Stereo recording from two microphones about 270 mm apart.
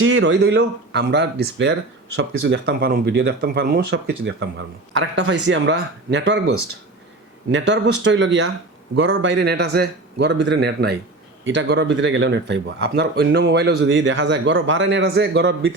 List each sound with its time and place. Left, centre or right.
0.0 s speech: right
7.5 s speech: right